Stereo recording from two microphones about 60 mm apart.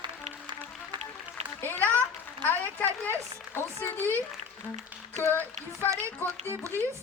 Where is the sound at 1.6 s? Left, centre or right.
Left.